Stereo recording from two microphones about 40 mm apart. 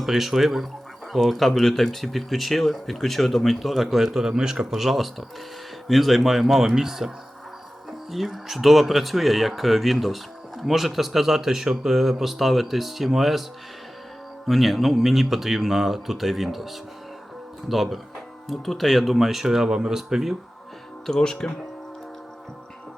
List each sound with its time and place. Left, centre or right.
0.0 s speech: centre
14.4 s speech: centre
21.1 s speech: centre